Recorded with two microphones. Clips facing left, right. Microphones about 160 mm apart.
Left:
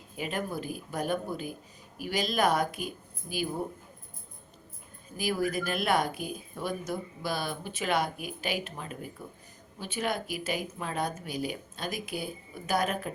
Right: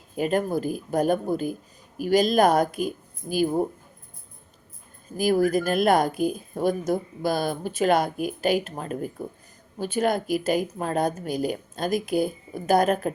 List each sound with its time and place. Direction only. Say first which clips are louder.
0.2 s speech: right 10 dB; 45° right (ahead or behind)
5.1 s speech: right 9 dB; 45° right (ahead or behind)